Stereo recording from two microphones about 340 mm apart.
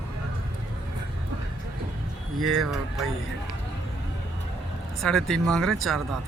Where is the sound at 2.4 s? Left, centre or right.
Centre.